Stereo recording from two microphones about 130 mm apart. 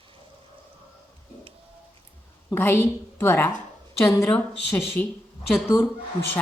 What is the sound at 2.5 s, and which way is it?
A woman's voice, 15° left (ahead or behind).